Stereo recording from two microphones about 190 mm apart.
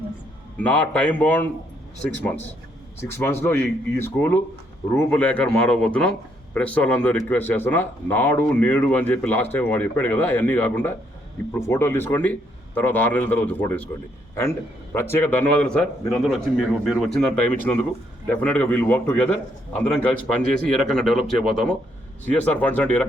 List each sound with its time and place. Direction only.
0.5 s a man's voice: 10° left (ahead or behind)
3.1 s a man's voice: 10° left (ahead or behind)
14.9 s a man's voice: 10° left (ahead or behind)